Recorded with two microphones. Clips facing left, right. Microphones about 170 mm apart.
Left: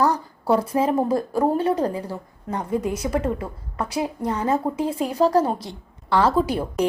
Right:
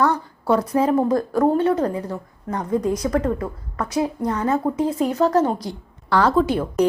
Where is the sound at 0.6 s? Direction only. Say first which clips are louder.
Right 2 dB; 30° left (ahead or behind).